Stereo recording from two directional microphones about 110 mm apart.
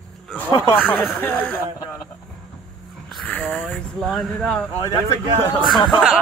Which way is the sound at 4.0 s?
5° left (ahead or behind).